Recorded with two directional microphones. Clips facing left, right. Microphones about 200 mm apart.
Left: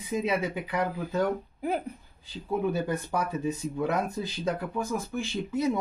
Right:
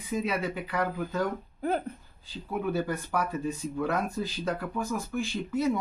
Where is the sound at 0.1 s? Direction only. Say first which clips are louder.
Left 2 dB; 20° left (ahead or behind).